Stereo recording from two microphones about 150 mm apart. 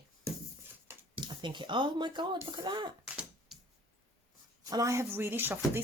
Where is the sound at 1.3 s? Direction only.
30° right (ahead or behind).